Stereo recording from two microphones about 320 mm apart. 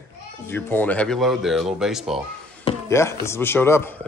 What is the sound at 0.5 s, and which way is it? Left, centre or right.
Speech, centre.